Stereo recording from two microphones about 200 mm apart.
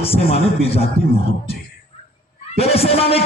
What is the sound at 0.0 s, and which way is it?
A man's voice, 30° left (ahead or behind).